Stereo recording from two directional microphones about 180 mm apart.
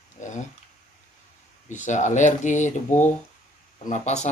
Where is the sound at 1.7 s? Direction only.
40° left (ahead or behind).